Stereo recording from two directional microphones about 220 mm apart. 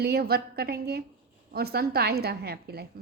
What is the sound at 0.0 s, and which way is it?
A woman's voice, 45° right (ahead or behind).